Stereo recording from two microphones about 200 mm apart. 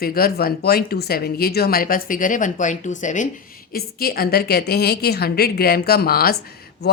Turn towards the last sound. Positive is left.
turn(degrees=55)  # may be behind; listen again after turning